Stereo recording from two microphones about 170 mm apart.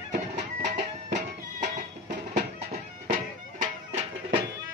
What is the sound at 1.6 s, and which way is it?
Music, 45° right (ahead or behind).